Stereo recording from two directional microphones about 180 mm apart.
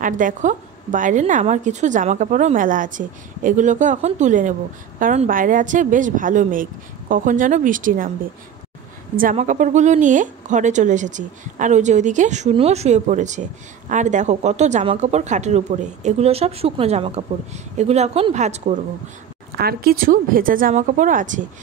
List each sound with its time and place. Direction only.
0.0 s a woman's voice: 45° right (ahead or behind)
9.1 s a woman's voice: 50° right (ahead or behind)
19.5 s a woman's voice: 60° right (ahead or behind)